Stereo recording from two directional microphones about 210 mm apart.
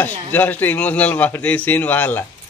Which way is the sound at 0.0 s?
10° left (ahead or behind).